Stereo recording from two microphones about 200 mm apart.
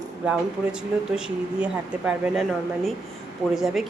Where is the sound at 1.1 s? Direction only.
5° right (ahead or behind).